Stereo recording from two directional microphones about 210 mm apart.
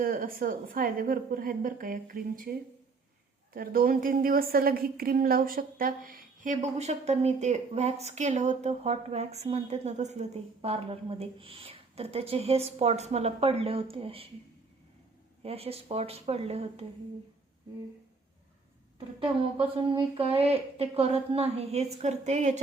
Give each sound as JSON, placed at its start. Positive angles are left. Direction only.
{"t": 0.0, "sound": "a woman's voice", "side_deg": -45}
{"t": 15.4, "sound": "speech", "side_deg": -30}
{"t": 18.9, "sound": "speech", "side_deg": -25}